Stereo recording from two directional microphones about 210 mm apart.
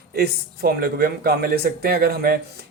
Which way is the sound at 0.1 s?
45° right (ahead or behind).